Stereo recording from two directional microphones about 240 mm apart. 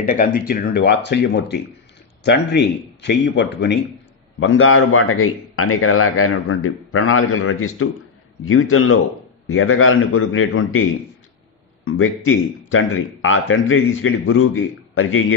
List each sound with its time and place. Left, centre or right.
0.0 s a man's voice: left
11.8 s a man's voice: left